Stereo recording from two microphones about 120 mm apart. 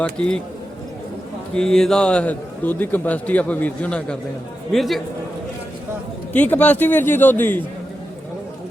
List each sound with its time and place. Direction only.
0.0 s a man's voice: 5° left (ahead or behind)
1.5 s a man's voice: 5° left (ahead or behind)
6.3 s a man's voice: 15° left (ahead or behind)